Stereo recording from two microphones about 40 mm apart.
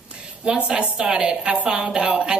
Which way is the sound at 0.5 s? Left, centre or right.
Right.